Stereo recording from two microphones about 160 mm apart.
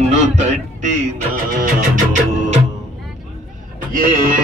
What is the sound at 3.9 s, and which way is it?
Speech, 60° right (ahead or behind).